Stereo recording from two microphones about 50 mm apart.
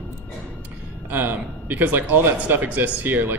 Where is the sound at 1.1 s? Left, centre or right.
Right.